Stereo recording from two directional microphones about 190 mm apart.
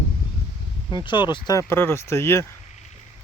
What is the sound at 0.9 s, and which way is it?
Speech, 25° left (ahead or behind).